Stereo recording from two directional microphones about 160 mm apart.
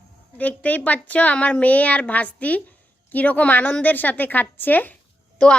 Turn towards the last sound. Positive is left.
turn(degrees=5)  # may be behind; listen again after turning